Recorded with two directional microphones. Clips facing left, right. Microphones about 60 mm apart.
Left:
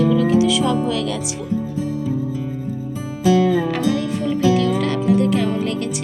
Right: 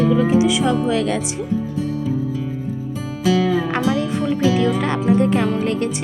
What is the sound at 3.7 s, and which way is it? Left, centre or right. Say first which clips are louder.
Music: even; right.